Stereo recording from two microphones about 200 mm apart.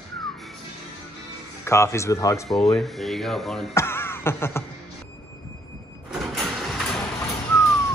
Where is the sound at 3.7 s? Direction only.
10° left (ahead or behind).